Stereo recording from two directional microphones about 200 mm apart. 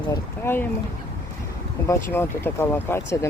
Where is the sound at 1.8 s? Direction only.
10° left (ahead or behind).